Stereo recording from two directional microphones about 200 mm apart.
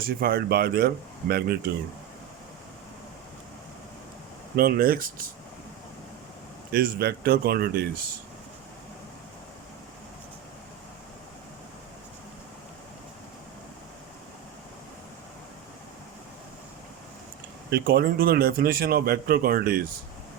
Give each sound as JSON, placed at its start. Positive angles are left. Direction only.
{"t": 0.0, "sound": "speech", "side_deg": -50}
{"t": 4.5, "sound": "speech", "side_deg": -45}
{"t": 6.7, "sound": "speech", "side_deg": -50}
{"t": 17.7, "sound": "speech", "side_deg": -50}